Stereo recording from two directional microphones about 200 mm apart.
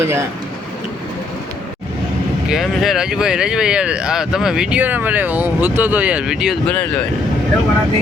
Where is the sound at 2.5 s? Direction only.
Centre (ahead or behind).